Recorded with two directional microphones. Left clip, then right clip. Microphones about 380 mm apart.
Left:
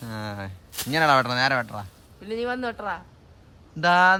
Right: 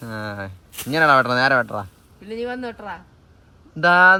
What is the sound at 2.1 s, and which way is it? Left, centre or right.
Speech, left.